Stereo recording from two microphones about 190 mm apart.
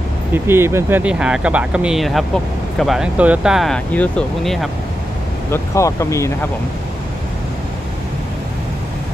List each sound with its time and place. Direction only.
0.3 s speech: 15° right (ahead or behind)
5.5 s speech: 15° left (ahead or behind)